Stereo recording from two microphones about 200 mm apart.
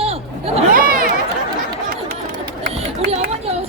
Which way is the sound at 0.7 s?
45° right (ahead or behind).